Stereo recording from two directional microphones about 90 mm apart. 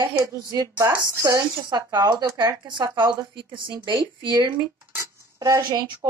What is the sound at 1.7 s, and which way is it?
Speech, 50° right (ahead or behind).